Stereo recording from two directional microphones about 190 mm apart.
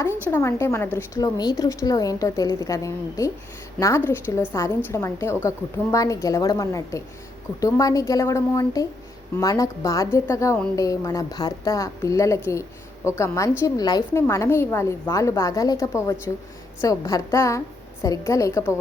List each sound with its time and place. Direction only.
0.0 s a woman's voice: 15° left (ahead or behind)